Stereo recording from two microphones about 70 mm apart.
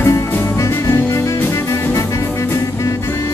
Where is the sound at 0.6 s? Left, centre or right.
Left.